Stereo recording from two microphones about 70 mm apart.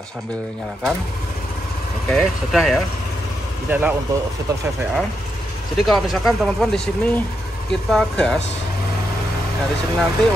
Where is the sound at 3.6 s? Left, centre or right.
Right.